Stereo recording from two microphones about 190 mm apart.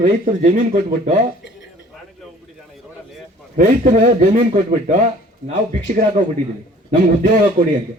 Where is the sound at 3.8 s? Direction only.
45° right (ahead or behind).